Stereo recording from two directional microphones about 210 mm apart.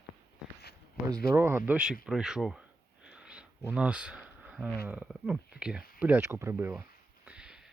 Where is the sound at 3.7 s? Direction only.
5° right (ahead or behind).